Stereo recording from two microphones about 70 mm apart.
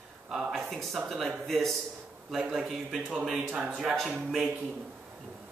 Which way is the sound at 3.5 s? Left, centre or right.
Right.